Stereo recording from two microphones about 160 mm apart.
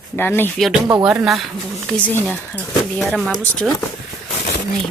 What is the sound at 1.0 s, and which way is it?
A woman's voice, centre (ahead or behind).